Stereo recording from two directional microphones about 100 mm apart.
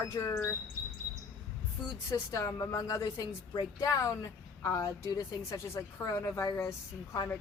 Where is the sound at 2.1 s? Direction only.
30° left (ahead or behind).